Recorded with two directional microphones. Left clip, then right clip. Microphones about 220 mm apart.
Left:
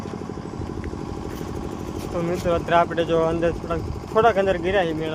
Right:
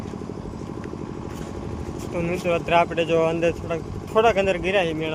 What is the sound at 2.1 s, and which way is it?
Speech, 5° right (ahead or behind).